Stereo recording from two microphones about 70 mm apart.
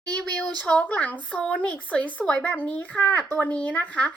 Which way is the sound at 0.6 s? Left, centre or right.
Centre.